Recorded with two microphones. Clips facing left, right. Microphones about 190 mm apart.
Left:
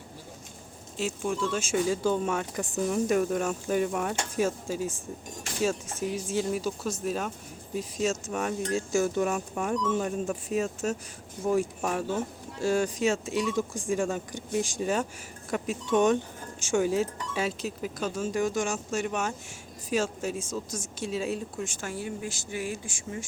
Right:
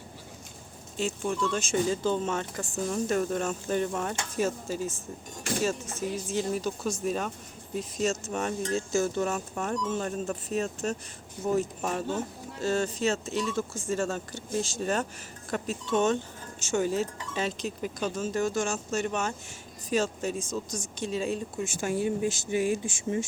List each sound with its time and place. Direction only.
0.9 s speech: 5° left (ahead or behind)
21.8 s speech: 20° right (ahead or behind)